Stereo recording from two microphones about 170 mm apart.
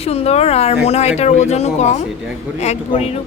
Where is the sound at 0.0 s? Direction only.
35° left (ahead or behind).